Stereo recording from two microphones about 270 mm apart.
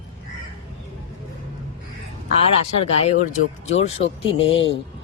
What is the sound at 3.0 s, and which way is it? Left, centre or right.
Speech, left.